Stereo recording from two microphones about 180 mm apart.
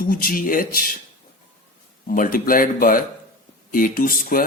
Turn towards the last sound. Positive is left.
turn(degrees=50)  # may be behind; listen again after turning